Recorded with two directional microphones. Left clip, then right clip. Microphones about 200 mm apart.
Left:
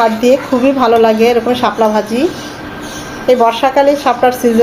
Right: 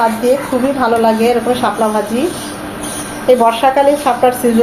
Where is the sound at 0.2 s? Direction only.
40° left (ahead or behind).